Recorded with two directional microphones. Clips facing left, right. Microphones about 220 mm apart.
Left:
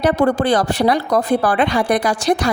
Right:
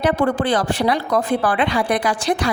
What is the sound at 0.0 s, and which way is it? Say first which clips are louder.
Speech: left 3 dB; 40° left (ahead or behind).